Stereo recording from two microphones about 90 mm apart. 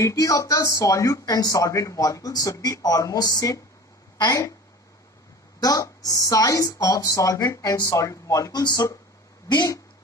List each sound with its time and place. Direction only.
0.0 s speech: 40° left (ahead or behind)
5.6 s speech: 45° left (ahead or behind)